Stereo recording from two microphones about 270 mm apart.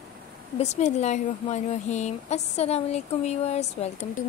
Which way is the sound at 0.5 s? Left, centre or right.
Left.